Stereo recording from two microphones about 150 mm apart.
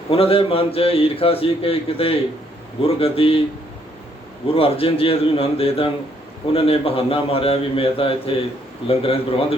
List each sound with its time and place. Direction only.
0.1 s a man's voice: 40° left (ahead or behind)
4.4 s a man's voice: 40° left (ahead or behind)